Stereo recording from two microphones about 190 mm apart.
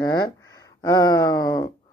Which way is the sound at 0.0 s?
20° left (ahead or behind).